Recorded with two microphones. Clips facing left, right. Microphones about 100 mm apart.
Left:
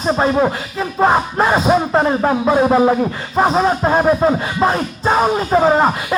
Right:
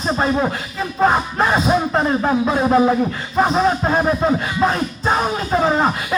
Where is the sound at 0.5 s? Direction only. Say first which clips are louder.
Left 3 dB; 35° left (ahead or behind).